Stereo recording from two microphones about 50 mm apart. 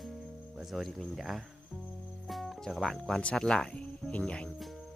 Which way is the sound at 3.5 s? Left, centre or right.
Centre.